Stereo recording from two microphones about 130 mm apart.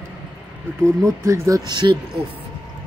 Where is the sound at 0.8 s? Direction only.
25° right (ahead or behind).